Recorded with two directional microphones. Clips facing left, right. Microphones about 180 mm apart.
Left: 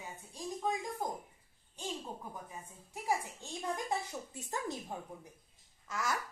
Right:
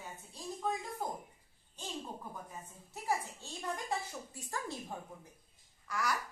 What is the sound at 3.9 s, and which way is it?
Speech, 20° left (ahead or behind).